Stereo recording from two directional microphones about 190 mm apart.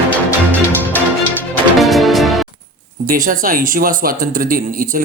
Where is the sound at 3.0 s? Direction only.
45° right (ahead or behind).